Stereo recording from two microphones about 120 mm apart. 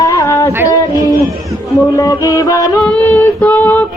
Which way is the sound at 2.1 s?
30° left (ahead or behind).